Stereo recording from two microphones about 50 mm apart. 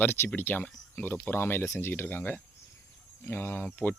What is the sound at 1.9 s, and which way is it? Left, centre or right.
Speech, left.